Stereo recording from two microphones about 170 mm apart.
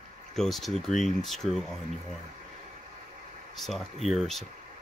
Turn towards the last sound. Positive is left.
turn(degrees=0)  # may be behind; listen again after turning